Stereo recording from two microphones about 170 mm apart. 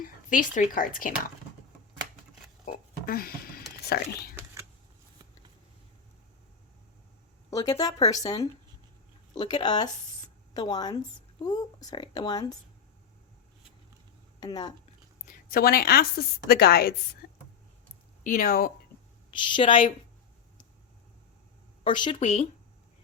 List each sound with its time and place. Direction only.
0.0 s a woman's voice: 50° left (ahead or behind)
2.7 s oink: 55° left (ahead or behind)
3.1 s speech: 60° left (ahead or behind)
7.5 s speech: 20° left (ahead or behind)
14.4 s speech: 25° left (ahead or behind)
15.3 s a woman's voice: 60° left (ahead or behind)
18.2 s speech: 50° left (ahead or behind)
19.5 s speech: 30° left (ahead or behind)
21.8 s speech: 30° left (ahead or behind)